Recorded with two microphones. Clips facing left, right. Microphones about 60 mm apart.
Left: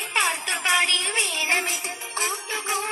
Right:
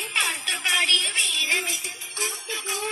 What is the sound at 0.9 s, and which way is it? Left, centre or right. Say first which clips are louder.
Music: even; left.